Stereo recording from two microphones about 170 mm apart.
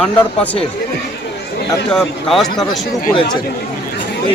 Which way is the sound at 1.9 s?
Centre (ahead or behind).